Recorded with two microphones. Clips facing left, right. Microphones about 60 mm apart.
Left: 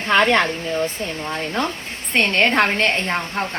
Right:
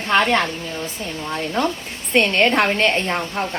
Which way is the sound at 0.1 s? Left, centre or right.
Left.